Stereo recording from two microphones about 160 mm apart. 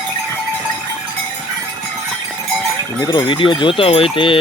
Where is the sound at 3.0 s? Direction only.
25° left (ahead or behind).